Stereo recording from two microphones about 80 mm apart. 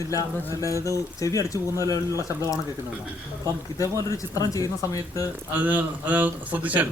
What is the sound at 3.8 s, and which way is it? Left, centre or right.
Speech, left.